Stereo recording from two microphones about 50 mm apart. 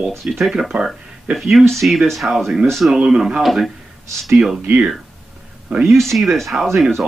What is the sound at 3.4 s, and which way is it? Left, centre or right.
Speech, centre.